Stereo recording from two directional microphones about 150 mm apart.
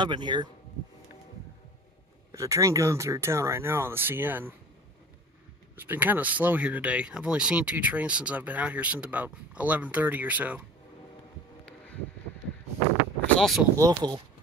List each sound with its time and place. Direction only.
0.0 s speech: 30° right (ahead or behind)
2.3 s speech: 20° right (ahead or behind)
5.8 s speech: 10° right (ahead or behind)
13.4 s speech: centre (ahead or behind)
13.7 s speech: 25° right (ahead or behind)